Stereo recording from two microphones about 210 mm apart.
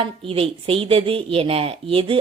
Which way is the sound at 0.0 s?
25° right (ahead or behind).